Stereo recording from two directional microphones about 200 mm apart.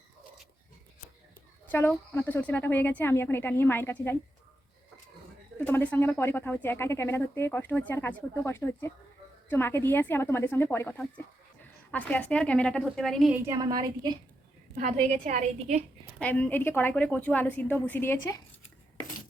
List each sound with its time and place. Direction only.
1.6 s a woman's voice: 10° left (ahead or behind)
5.5 s a woman's voice: 10° left (ahead or behind)
13.4 s a woman's voice: 15° right (ahead or behind)
14.8 s a woman's voice: 35° right (ahead or behind)
16.1 s a woman's voice: 5° left (ahead or behind)